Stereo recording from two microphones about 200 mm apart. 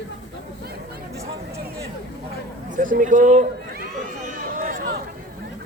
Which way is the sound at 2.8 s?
40° right (ahead or behind).